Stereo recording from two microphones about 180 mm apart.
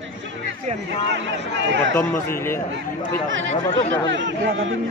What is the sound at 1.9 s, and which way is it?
Speech, 15° left (ahead or behind).